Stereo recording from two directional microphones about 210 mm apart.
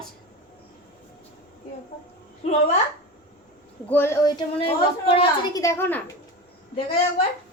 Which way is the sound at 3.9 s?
10° left (ahead or behind).